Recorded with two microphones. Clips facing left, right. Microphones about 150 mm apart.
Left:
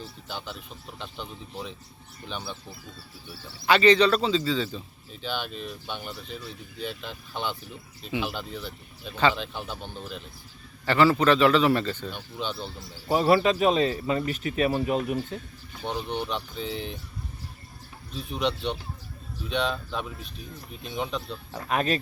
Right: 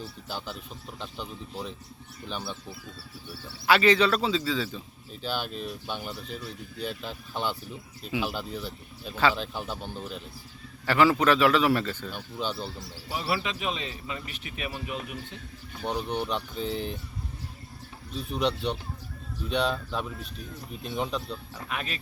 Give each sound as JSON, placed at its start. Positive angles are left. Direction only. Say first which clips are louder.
{"t": 0.3, "sound": "a man's voice", "louder": "even", "side_deg": -5}
{"t": 13.1, "sound": "speech", "louder": "left 10 dB", "side_deg": 40}
{"t": 15.8, "sound": "speech", "louder": "right 1 dB", "side_deg": 0}
{"t": 18.2, "sound": "speech", "louder": "even", "side_deg": 0}
{"t": 21.5, "sound": "speech", "louder": "left 12 dB", "side_deg": 40}